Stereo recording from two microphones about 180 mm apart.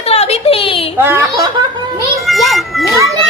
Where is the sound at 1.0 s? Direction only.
10° right (ahead or behind).